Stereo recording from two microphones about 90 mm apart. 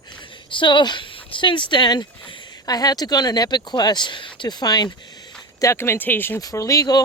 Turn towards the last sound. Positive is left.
turn(degrees=45)  # may be behind; listen again after turning